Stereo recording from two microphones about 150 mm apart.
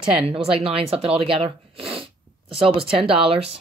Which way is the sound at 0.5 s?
40° right (ahead or behind).